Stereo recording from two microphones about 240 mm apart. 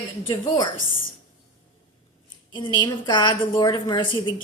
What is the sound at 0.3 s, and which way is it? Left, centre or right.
Speech, centre.